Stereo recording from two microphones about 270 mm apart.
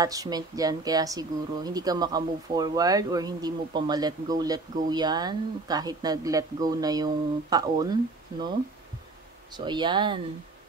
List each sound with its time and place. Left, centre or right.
0.0 s speech: centre